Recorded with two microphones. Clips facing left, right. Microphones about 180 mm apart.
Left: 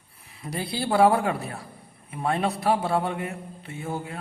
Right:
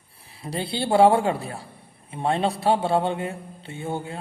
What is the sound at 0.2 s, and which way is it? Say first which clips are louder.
A man's voice: right 2 dB; 30° right (ahead or behind).